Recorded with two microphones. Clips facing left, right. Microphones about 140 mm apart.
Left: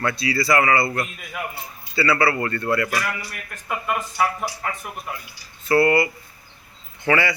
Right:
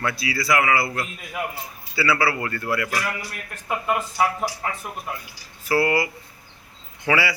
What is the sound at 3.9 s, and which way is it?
Speech, 20° right (ahead or behind).